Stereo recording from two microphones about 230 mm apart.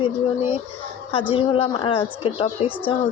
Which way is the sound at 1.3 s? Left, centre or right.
Left.